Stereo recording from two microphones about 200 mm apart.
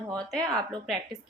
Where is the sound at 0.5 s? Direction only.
Centre (ahead or behind).